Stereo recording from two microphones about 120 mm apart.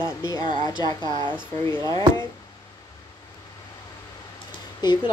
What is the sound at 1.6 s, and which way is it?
Speech, 30° left (ahead or behind).